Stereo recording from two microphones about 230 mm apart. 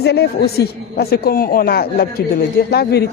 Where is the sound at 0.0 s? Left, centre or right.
Left.